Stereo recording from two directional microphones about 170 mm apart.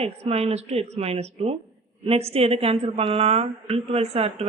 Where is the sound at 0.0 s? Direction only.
35° right (ahead or behind).